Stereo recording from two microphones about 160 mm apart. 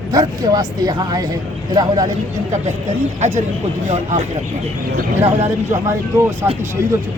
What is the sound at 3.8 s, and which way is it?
Speech, 45° right (ahead or behind).